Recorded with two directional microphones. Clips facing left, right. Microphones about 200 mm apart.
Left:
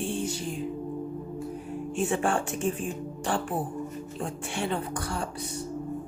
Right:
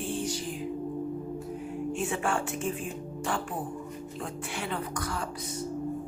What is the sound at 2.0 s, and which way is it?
Speech, 35° left (ahead or behind).